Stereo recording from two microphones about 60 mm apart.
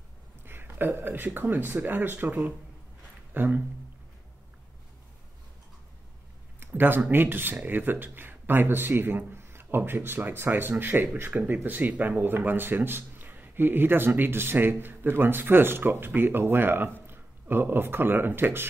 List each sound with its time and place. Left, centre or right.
0.5 s speech: right
3.3 s speech: right
6.6 s a sound: right
7.1 s speech: right